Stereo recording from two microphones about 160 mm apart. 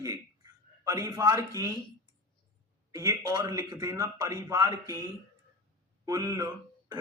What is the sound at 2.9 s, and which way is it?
Speech, 20° right (ahead or behind).